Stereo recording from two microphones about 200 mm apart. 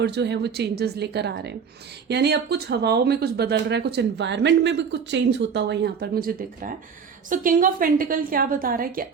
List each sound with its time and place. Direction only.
0.0 s a woman's voice: 55° right (ahead or behind)